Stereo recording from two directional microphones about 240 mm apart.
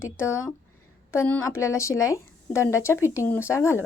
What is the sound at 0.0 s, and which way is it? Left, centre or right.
A woman's voice, centre.